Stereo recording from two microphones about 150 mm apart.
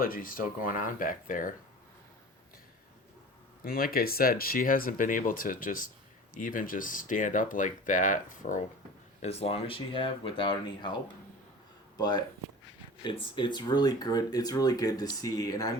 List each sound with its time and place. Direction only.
0.0 s speech: 70° left (ahead or behind)
3.6 s speech: 75° left (ahead or behind)
9.2 s speech: 40° left (ahead or behind)
11.9 s speech: 25° left (ahead or behind)